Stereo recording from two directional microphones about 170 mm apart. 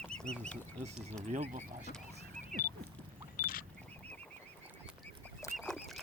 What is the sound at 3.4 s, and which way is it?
Single-lens reflex camera, 60° left (ahead or behind).